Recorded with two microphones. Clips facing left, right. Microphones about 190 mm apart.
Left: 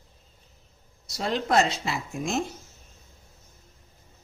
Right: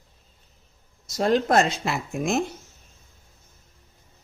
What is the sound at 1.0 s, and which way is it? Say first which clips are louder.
Speech: right 7 dB; 45° right (ahead or behind).